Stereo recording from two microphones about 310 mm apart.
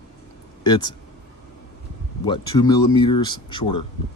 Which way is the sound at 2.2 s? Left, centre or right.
Centre.